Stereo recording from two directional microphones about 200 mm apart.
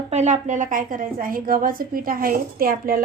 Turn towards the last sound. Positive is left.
turn(degrees=-45)  # may be behind; listen again after turning